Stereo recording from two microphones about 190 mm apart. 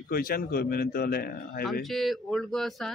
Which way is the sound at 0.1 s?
50° left (ahead or behind).